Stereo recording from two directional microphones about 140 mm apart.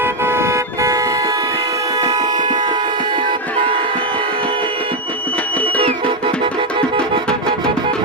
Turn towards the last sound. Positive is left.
turn(degrees=-40)  # may be behind; listen again after turning